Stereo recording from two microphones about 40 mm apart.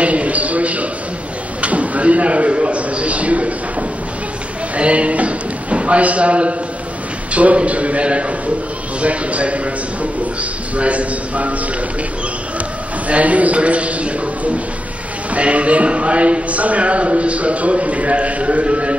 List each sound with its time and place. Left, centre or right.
0.0 s a sound: right
4.7 s speech: right
10.8 s speech: right
13.1 s speech: right